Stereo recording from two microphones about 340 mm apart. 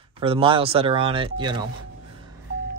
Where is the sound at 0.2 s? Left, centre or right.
Centre.